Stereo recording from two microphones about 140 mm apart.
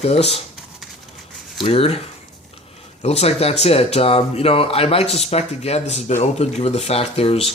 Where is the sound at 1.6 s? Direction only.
45° left (ahead or behind).